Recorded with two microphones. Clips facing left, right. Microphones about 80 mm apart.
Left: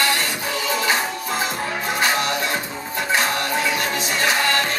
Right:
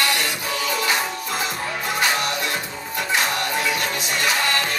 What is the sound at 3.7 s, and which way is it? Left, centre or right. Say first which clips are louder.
Music: left 2 dB; left.